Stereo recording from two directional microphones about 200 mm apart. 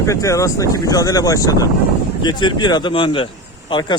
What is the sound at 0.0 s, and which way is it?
Speech, 15° left (ahead or behind).